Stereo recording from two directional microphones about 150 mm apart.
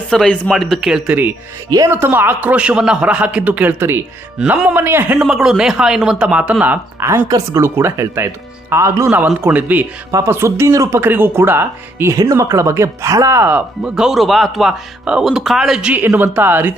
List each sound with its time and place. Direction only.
0.1 s speech: 5° left (ahead or behind)
1.7 s speech: 20° right (ahead or behind)